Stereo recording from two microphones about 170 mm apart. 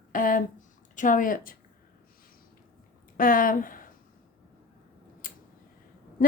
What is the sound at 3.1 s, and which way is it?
Speech, 55° left (ahead or behind).